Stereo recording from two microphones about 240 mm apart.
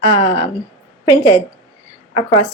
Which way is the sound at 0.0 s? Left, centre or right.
Left.